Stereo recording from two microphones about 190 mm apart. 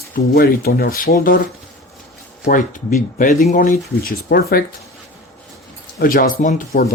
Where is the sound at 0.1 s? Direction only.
50° left (ahead or behind).